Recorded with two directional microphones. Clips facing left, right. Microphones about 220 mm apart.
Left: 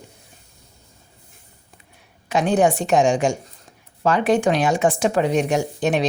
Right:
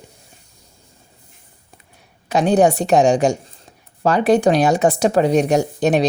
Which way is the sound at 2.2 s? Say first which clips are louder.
Right 3 dB; 35° right (ahead or behind).